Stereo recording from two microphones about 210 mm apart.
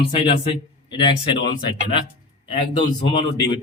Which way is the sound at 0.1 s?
25° left (ahead or behind).